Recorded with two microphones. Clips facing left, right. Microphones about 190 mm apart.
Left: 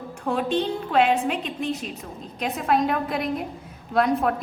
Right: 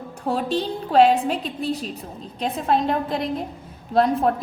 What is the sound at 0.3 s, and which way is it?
A woman's voice, 35° right (ahead or behind).